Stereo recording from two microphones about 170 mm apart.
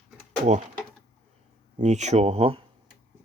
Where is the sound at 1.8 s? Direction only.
45° right (ahead or behind).